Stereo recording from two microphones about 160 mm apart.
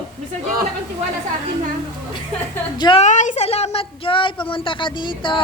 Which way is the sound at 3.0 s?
50° left (ahead or behind).